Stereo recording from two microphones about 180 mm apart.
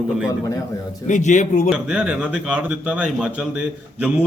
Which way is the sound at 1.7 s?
5° right (ahead or behind).